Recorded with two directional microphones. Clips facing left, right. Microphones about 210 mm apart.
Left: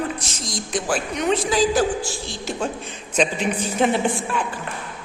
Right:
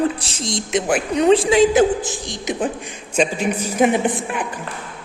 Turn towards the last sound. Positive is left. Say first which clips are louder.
# right 2 dB
turn(degrees=-20)  # may be behind; listen again after turning